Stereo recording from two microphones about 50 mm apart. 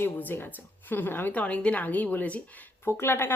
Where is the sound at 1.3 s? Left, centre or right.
Left.